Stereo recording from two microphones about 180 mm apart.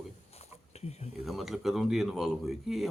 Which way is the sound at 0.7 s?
35° left (ahead or behind).